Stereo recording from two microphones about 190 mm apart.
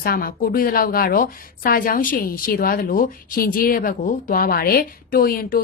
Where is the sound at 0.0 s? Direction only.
50° left (ahead or behind).